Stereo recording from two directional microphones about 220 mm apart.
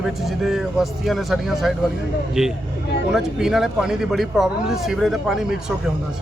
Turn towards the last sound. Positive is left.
turn(degrees=0)  # may be behind; listen again after turning